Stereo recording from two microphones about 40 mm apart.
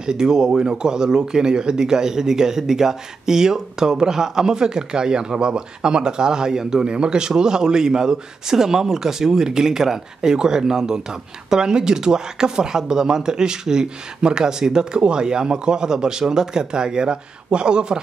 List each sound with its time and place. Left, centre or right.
0.0 s speech: centre